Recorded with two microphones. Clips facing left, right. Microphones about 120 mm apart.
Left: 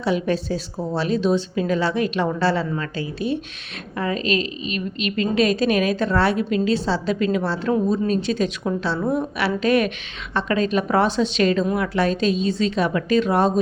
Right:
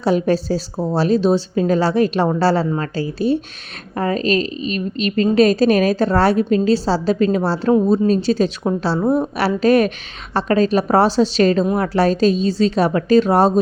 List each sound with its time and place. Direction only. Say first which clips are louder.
0.0 s a woman's voice: right 5 dB; 40° right (ahead or behind)